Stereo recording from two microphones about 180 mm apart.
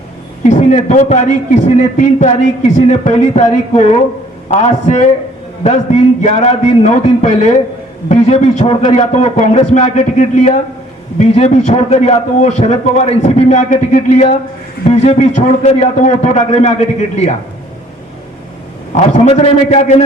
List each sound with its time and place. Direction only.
0.4 s a man's voice: 40° left (ahead or behind)
19.1 s a man's voice: 40° left (ahead or behind)